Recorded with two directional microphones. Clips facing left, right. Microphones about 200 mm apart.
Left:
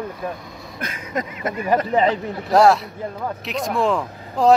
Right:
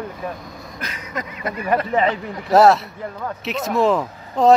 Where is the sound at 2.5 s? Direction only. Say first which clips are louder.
Right 1 dB; centre (ahead or behind).